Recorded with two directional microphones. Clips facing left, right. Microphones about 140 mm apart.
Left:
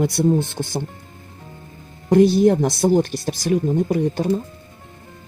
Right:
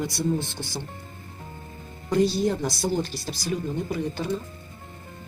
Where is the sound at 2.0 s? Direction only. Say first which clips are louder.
Left 9 dB; 55° left (ahead or behind).